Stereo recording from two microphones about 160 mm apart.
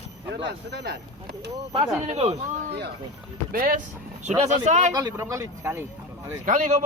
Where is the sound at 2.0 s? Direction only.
40° right (ahead or behind).